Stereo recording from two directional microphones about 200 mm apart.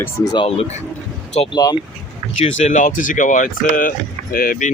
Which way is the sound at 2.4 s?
40° left (ahead or behind).